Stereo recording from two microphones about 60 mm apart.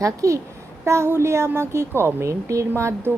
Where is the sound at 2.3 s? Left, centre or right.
Right.